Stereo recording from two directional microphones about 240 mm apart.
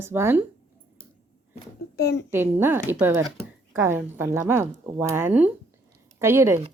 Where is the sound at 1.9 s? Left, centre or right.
Left.